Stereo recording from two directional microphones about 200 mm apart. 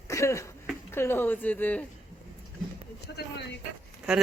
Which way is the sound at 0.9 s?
10° left (ahead or behind).